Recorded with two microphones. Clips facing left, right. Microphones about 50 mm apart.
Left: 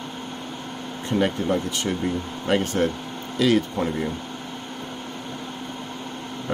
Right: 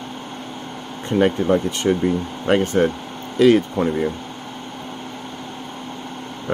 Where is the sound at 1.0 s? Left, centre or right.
Centre.